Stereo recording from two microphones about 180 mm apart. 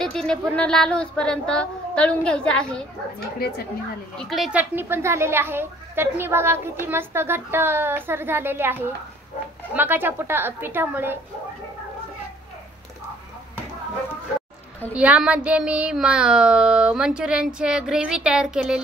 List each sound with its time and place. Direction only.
0.0 s speech: 5° left (ahead or behind)
3.3 s a woman's voice: 60° left (ahead or behind)
4.2 s speech: centre (ahead or behind)
15.0 s speech: 5° right (ahead or behind)